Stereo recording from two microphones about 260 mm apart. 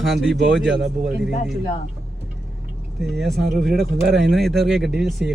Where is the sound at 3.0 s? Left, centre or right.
Centre.